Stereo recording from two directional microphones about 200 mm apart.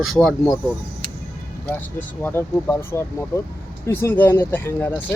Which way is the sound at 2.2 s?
10° left (ahead or behind).